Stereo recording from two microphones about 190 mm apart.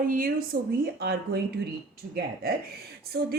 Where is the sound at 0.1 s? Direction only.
50° right (ahead or behind).